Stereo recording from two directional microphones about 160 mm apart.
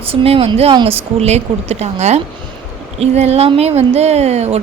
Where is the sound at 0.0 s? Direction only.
35° right (ahead or behind).